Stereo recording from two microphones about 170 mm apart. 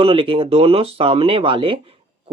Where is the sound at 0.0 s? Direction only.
30° right (ahead or behind).